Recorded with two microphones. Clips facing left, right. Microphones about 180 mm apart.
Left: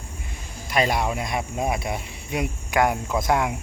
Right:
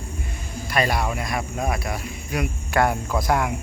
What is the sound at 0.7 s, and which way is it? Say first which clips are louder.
Speech: left 1 dB; 20° left (ahead or behind).